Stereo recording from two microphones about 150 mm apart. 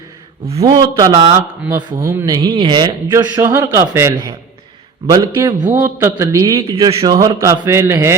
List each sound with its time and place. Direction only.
0.6 s speech: 25° right (ahead or behind)